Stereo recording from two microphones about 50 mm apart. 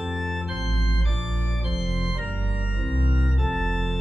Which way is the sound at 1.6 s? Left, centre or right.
Centre.